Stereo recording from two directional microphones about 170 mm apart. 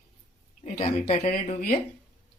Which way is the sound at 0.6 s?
40° left (ahead or behind).